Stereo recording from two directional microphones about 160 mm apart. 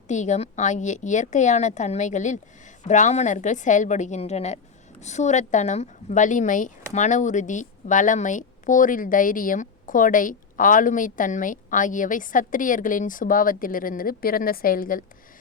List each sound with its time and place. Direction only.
0.1 s a woman's voice: 45° left (ahead or behind)